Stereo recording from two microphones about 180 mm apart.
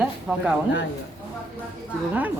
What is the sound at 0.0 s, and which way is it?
Speech, 10° right (ahead or behind).